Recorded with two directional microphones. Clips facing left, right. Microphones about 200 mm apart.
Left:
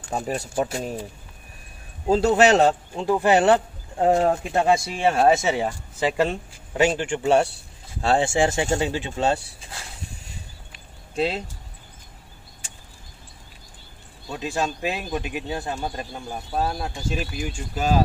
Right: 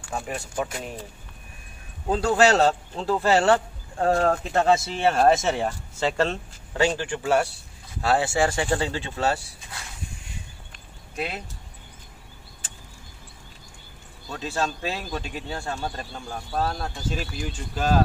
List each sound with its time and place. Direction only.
0.0 s speech: 35° left (ahead or behind)
2.0 s speech: 25° left (ahead or behind)
11.1 s speech: 25° left (ahead or behind)
14.3 s speech: 15° left (ahead or behind)